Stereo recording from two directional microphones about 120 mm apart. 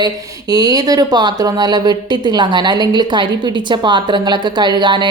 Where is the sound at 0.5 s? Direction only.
35° right (ahead or behind).